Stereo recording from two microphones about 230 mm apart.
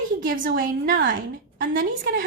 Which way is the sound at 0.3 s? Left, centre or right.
Right.